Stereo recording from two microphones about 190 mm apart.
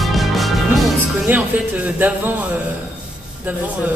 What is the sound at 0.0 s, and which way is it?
Music, centre (ahead or behind).